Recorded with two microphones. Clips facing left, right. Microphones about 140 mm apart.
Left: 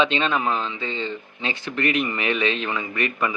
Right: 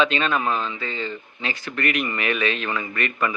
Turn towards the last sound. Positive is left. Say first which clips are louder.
# even
turn(degrees=20)  # may be behind; listen again after turning